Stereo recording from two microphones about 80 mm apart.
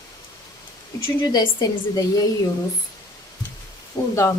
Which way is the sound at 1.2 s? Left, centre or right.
Left.